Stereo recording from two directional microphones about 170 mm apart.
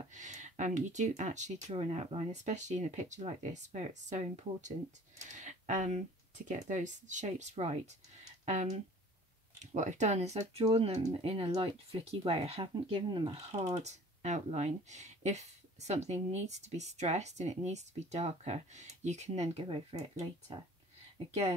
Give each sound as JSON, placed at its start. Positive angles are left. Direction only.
{"t": 0.1, "sound": "speech", "side_deg": -45}